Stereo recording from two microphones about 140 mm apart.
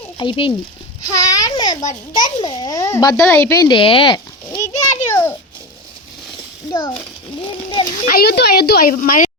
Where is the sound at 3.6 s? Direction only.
40° left (ahead or behind).